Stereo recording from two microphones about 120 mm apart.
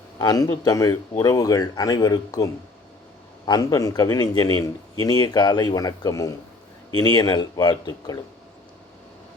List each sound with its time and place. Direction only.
0.2 s a man's voice: 30° left (ahead or behind)